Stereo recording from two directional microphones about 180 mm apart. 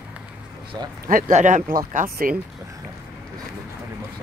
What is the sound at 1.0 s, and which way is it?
Speech, 50° right (ahead or behind).